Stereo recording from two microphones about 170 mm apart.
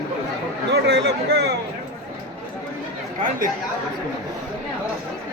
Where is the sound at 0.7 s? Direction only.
80° right.